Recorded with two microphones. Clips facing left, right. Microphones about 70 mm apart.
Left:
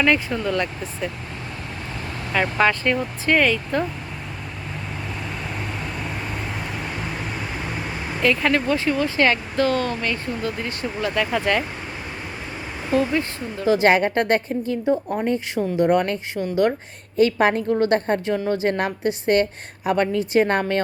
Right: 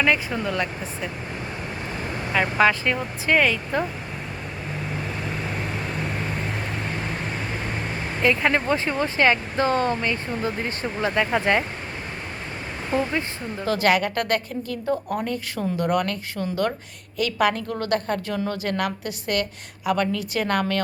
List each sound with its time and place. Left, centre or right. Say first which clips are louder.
0.0 s speech: left 2 dB; centre
2.3 s speech: even; centre
5.4 s vehicle: right 1 dB; centre
8.2 s speech: left 1 dB; centre
12.9 s speech: left 4 dB; centre
13.7 s a woman's voice: left 4 dB; left